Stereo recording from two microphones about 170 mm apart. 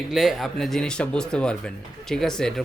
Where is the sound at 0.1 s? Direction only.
Centre (ahead or behind).